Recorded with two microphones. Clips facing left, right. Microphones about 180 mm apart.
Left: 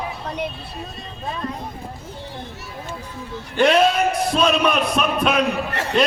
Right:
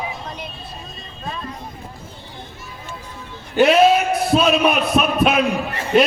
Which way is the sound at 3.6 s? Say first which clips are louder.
Right 3 dB; 5° right (ahead or behind).